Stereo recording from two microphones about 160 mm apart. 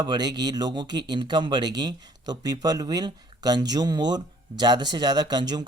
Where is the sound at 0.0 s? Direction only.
25° right (ahead or behind).